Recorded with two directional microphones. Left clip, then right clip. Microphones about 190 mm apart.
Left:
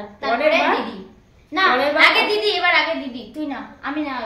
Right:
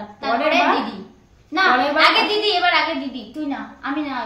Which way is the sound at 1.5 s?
5° left (ahead or behind).